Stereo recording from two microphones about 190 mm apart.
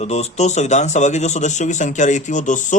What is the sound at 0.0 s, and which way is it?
Speech, 35° left (ahead or behind).